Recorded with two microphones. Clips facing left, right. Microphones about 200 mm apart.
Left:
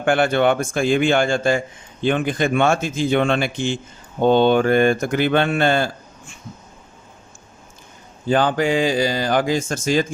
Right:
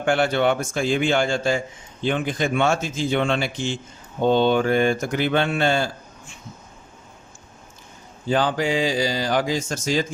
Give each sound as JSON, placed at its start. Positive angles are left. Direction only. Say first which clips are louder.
{"t": 0.0, "sound": "speech", "louder": "left 3 dB", "side_deg": 55}
{"t": 8.3, "sound": "speech", "louder": "left 3 dB", "side_deg": 55}